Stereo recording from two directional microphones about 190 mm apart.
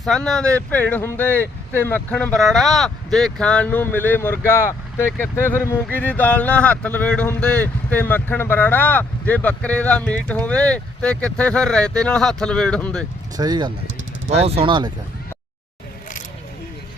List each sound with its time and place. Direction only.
0.0 s speech: centre (ahead or behind)
13.3 s speech: 20° right (ahead or behind)